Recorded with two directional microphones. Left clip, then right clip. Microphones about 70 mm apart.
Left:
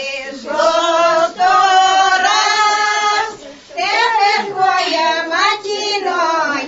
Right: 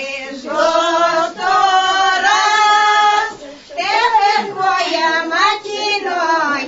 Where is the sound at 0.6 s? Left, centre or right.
Left.